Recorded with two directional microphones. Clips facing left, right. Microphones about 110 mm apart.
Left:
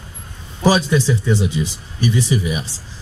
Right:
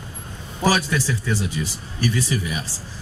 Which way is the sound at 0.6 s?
20° left (ahead or behind).